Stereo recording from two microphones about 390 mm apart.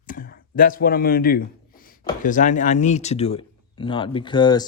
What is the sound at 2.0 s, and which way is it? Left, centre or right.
Speech, centre.